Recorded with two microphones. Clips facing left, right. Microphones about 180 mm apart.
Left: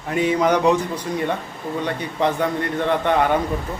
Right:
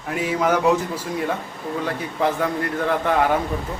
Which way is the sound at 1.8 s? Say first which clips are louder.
Left 1 dB; 5° right (ahead or behind).